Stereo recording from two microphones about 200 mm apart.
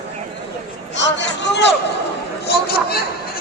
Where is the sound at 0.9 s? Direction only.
65° left (ahead or behind).